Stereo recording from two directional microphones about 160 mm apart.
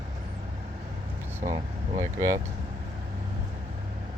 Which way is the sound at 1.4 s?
20° right (ahead or behind).